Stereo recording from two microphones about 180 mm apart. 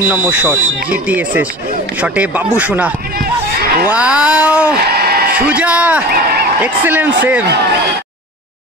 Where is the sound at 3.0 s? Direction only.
55° right (ahead or behind).